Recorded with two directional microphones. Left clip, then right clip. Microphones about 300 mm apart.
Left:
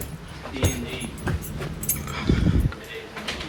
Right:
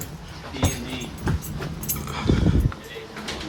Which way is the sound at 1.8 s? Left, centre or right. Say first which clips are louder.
Right 1 dB; centre.